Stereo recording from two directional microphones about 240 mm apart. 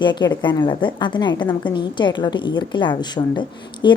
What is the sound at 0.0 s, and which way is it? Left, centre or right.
A woman's voice, centre.